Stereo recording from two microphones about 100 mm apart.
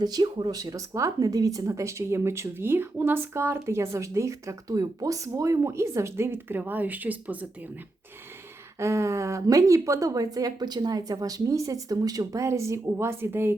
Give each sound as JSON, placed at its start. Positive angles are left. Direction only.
{"t": 0.0, "sound": "speech", "side_deg": -45}
{"t": 8.8, "sound": "speech", "side_deg": -30}